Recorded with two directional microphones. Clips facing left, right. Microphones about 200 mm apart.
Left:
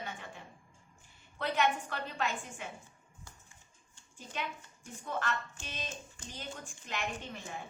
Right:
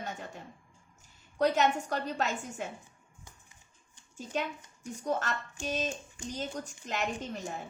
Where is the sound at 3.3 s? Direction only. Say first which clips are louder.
Right 1 dB; 15° right (ahead or behind).